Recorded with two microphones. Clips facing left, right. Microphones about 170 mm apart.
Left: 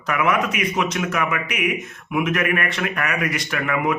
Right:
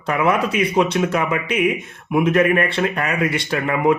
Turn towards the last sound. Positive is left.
turn(degrees=-30)  # may be behind; listen again after turning